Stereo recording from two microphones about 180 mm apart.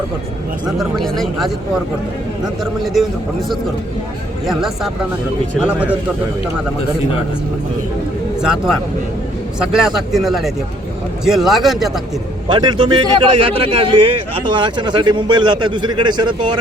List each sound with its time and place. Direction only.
0.8 s a man's voice: centre (ahead or behind)
2.8 s a man's voice: centre (ahead or behind)
4.4 s a man's voice: centre (ahead or behind)
9.6 s a man's voice: 5° right (ahead or behind)
12.5 s a man's voice: 25° right (ahead or behind)